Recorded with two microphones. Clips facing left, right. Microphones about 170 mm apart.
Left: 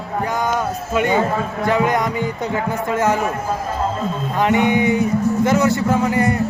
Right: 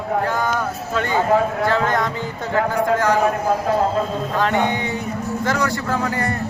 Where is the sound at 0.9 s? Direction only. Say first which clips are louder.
Even; 20° left (ahead or behind).